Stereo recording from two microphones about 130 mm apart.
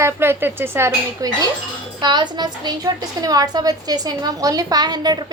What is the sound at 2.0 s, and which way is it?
A woman's voice, 35° right (ahead or behind).